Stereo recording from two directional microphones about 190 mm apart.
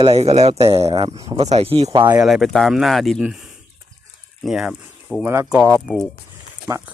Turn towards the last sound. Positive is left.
turn(degrees=-15)  # may be behind; listen again after turning